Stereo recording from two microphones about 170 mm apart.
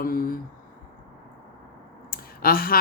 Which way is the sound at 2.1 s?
60° left (ahead or behind).